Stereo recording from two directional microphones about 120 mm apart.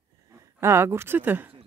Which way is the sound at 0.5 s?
20° right (ahead or behind).